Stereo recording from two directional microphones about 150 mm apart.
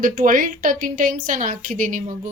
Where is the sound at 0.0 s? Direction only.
65° right (ahead or behind).